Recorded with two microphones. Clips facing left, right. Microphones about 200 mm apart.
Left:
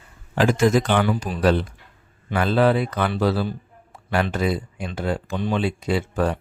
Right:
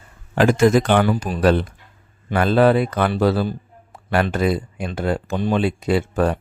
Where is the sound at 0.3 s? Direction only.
55° right (ahead or behind).